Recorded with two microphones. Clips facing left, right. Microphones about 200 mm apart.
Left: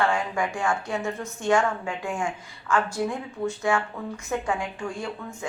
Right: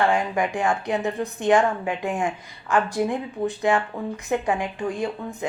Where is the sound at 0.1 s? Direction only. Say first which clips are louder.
Right 4 dB; 20° right (ahead or behind).